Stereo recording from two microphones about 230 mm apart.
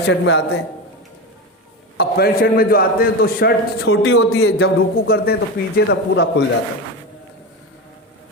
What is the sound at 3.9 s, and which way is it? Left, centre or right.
Speech, left.